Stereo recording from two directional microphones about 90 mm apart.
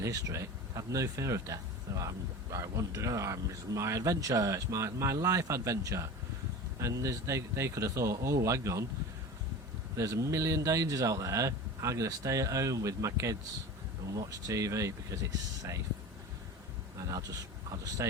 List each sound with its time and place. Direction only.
0.0 s speech: 40° right (ahead or behind)
10.0 s speech: 35° right (ahead or behind)
17.0 s speech: 40° right (ahead or behind)